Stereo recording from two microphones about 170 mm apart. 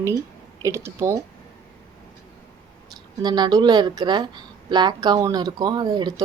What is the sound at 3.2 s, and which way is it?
Speech, 25° right (ahead or behind).